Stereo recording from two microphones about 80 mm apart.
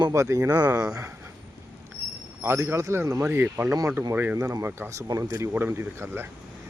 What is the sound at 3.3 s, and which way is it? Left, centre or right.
Speech, right.